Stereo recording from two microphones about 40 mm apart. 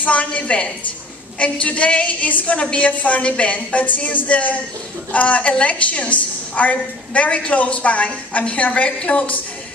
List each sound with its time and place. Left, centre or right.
0.0 s a woman's voice: left